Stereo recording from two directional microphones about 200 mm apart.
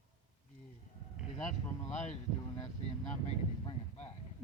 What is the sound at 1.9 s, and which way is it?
Speech, 35° left (ahead or behind).